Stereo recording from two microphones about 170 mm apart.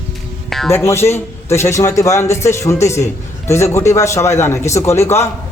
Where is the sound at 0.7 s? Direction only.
15° left (ahead or behind).